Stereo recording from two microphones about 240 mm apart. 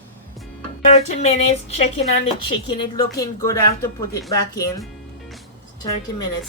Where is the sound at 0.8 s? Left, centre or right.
Left.